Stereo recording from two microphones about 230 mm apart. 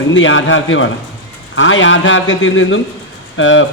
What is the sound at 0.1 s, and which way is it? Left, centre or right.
A man's voice, left.